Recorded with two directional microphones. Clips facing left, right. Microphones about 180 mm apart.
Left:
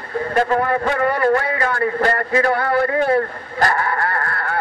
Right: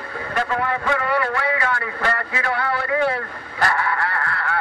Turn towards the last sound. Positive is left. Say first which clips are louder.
# left 2 dB
turn(degrees=40)  # may be behind; listen again after turning